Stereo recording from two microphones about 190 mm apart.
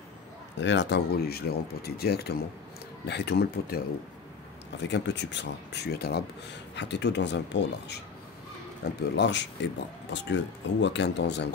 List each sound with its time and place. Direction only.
0.6 s speech: 70° left (ahead or behind)
4.8 s speech: 65° left (ahead or behind)